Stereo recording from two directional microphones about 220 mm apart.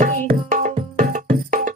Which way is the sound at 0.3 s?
35° right (ahead or behind).